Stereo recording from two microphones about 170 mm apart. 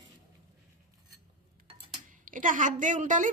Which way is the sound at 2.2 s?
50° right (ahead or behind).